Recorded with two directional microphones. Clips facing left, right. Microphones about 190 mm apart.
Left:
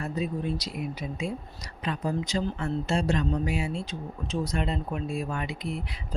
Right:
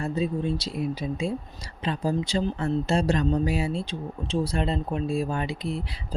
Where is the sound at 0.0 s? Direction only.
30° right (ahead or behind).